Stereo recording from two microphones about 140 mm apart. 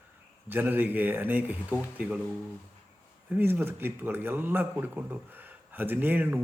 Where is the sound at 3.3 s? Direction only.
15° right (ahead or behind).